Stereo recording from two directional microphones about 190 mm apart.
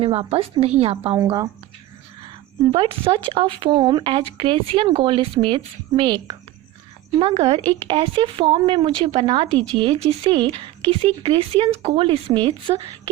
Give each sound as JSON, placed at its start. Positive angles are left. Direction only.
{"t": 0.0, "sound": "a woman's voice", "side_deg": -30}
{"t": 2.2, "sound": "speech", "side_deg": -25}
{"t": 7.2, "sound": "speech", "side_deg": -25}